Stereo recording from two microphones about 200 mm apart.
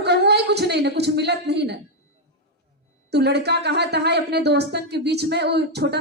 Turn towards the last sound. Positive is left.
turn(degrees=-55)  # may be behind; listen again after turning